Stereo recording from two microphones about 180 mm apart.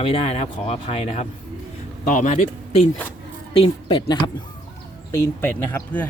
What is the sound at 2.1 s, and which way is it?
Speech, 45° left (ahead or behind).